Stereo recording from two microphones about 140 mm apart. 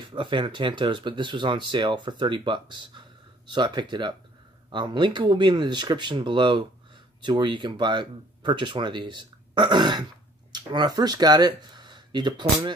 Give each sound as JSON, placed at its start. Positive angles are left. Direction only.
{"t": 0.0, "sound": "speech", "side_deg": -35}